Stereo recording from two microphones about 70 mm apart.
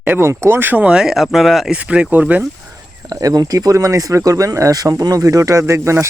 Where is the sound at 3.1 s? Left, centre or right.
Right.